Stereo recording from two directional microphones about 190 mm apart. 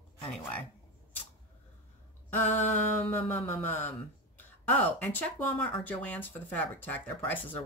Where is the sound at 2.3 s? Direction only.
10° left (ahead or behind).